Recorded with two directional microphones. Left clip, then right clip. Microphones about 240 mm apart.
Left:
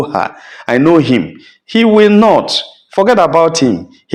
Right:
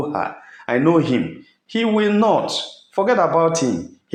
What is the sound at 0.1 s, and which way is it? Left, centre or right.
Speech, left.